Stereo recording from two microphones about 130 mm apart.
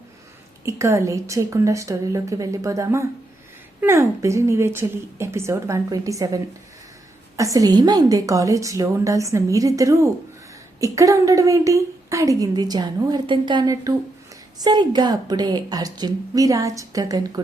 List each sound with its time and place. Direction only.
0.6 s a woman's voice: 20° right (ahead or behind)